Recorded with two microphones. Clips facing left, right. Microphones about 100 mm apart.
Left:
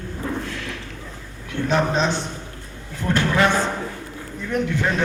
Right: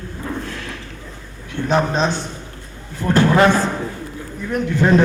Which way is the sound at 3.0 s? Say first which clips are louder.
Right 5 dB; 35° right (ahead or behind).